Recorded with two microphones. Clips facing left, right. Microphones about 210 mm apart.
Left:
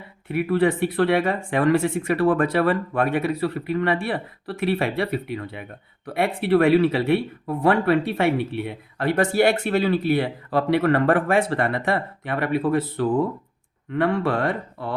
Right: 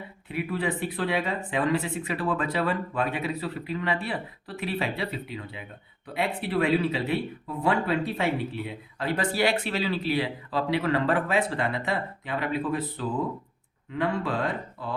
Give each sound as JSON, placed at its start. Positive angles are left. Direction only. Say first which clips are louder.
{"t": 0.3, "sound": "speech", "louder": "left 9 dB", "side_deg": 60}